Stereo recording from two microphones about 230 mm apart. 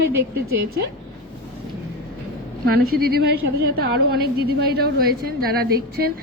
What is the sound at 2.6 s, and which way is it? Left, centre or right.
A woman's voice, right.